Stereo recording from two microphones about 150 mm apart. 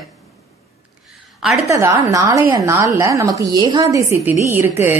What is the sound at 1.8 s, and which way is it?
A woman's voice, 20° right (ahead or behind).